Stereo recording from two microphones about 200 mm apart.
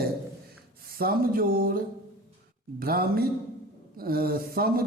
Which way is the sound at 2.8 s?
50° right (ahead or behind).